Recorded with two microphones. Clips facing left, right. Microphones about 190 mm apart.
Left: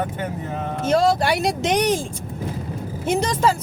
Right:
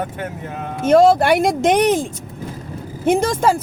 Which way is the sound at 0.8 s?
55° right (ahead or behind).